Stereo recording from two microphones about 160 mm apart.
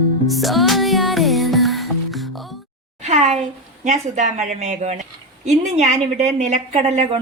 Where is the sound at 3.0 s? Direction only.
45° right (ahead or behind).